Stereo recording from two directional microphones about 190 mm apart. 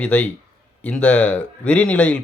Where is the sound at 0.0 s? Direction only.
10° left (ahead or behind).